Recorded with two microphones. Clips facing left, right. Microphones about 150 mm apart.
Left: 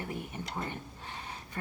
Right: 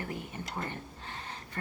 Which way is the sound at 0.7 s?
15° left (ahead or behind).